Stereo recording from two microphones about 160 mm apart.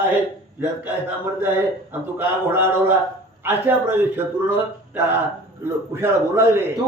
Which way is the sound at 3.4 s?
15° right (ahead or behind).